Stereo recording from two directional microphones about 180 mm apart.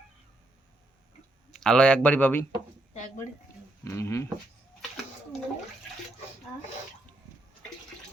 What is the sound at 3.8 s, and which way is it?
Speech, 15° left (ahead or behind).